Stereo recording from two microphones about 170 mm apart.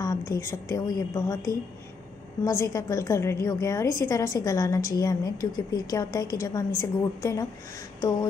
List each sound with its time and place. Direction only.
0.0 s a woman's voice: 20° left (ahead or behind)
2.4 s a woman's voice: 20° left (ahead or behind)